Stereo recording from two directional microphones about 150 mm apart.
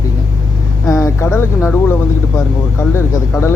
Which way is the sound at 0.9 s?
20° left (ahead or behind).